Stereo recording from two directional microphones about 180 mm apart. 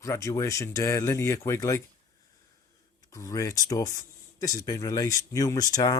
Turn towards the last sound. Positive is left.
turn(degrees=20)  # may be behind; listen again after turning